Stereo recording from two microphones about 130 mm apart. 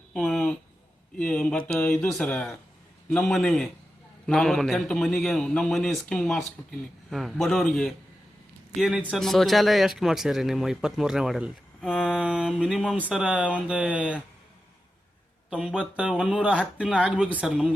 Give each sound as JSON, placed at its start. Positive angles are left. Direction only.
{"t": 0.1, "sound": "a sound", "side_deg": 5}
{"t": 1.2, "sound": "a man's voice", "side_deg": 10}
{"t": 8.8, "sound": "a man's voice", "side_deg": -5}
{"t": 15.4, "sound": "speech", "side_deg": -5}